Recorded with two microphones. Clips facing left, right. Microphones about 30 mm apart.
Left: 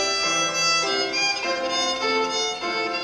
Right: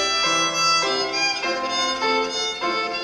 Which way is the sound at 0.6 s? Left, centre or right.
Centre.